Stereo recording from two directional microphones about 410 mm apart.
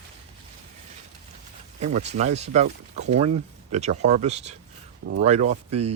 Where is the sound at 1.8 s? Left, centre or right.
Centre.